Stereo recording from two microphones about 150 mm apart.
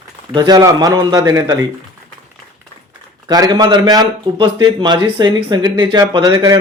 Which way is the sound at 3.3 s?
25° right (ahead or behind).